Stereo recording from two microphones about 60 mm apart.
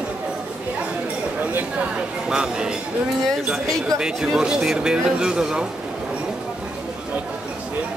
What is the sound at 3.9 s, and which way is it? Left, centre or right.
Speech, centre.